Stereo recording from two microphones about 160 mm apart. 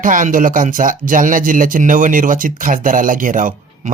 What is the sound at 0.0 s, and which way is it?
Speech, 55° right (ahead or behind).